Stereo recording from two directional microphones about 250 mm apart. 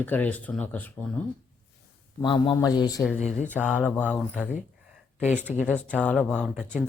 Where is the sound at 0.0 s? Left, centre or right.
Centre.